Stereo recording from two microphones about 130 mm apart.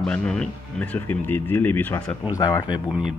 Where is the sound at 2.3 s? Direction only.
30° left (ahead or behind).